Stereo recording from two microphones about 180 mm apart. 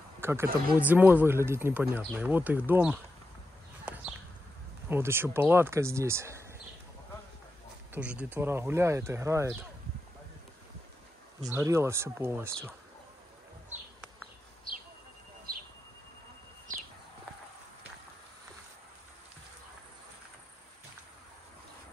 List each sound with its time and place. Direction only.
0.2 s speech: 15° right (ahead or behind)
3.8 s a sound: 10° right (ahead or behind)
4.8 s speech: 15° right (ahead or behind)
7.9 s speech: 5° right (ahead or behind)
11.4 s speech: 15° right (ahead or behind)